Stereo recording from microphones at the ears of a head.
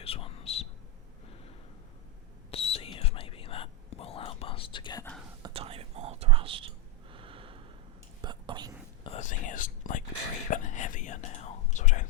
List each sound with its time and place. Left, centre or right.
0.0 s whispering: left
2.5 s whispering: left
5.4 s whispering: right
9.0 s whispering: left